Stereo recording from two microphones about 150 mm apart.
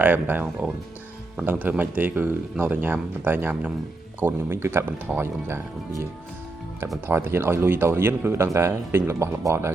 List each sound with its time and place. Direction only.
0.0 s speech: 10° right (ahead or behind)
7.1 s speech: 15° right (ahead or behind)